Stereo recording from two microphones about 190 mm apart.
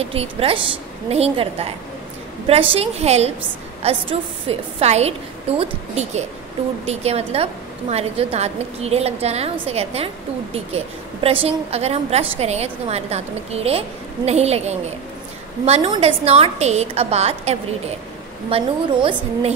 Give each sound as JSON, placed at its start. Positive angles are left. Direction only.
{"t": 0.0, "sound": "a woman's voice", "side_deg": -30}